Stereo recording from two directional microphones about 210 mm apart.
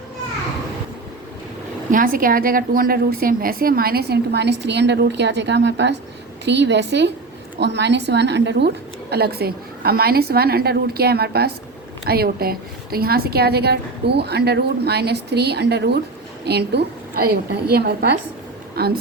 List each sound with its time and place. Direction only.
1.9 s a woman's voice: 40° right (ahead or behind)